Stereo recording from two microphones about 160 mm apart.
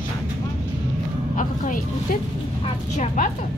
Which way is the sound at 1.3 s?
55° left (ahead or behind).